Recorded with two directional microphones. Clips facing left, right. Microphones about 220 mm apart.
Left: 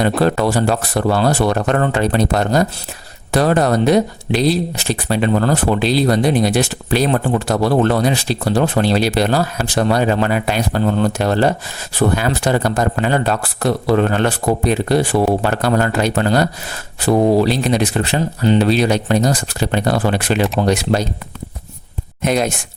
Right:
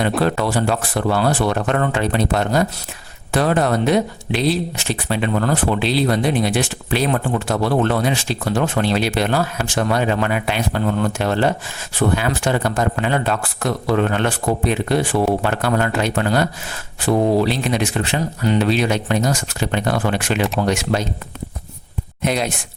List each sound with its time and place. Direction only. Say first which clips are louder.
0.2 s speech: left 3 dB; 40° left (ahead or behind)
22.2 s speech: left 4 dB; 45° left (ahead or behind)